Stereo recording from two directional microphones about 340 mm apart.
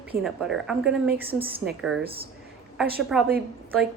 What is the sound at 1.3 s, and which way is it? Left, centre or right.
Speech, centre.